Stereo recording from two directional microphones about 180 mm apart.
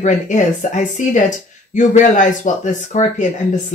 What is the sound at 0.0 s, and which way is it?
Speech, 45° left (ahead or behind).